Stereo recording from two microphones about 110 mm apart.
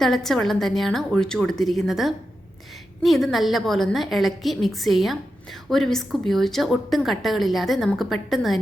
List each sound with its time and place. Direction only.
0.0 s a woman's voice: 5° left (ahead or behind)